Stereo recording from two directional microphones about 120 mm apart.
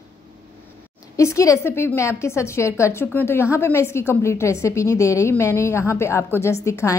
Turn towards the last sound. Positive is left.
turn(degrees=25)  # may be behind; listen again after turning